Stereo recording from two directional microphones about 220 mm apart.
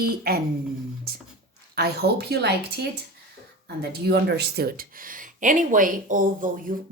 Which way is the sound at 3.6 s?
45° right (ahead or behind).